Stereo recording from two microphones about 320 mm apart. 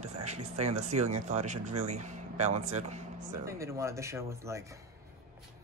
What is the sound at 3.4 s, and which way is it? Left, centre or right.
Speech, centre.